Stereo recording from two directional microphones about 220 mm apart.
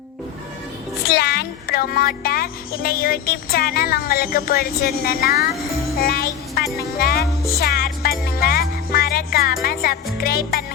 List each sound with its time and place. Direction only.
1.0 s speech: 45° left (ahead or behind)
7.6 s music: 45° left (ahead or behind)